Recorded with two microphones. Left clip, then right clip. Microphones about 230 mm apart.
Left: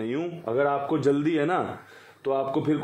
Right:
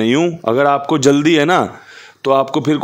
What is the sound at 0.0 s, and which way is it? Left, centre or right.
A man's voice, right.